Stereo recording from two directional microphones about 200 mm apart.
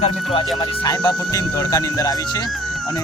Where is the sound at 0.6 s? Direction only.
20° left (ahead or behind).